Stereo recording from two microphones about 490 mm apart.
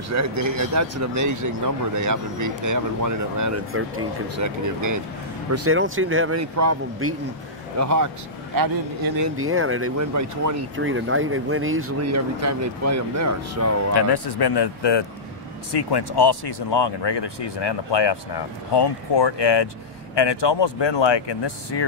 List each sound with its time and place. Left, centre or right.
0.1 s speech: right
9.4 s speech: right
10.8 s speech: right
13.9 s speech: left